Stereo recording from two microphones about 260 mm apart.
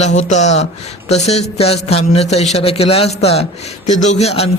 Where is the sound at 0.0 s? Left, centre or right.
Left.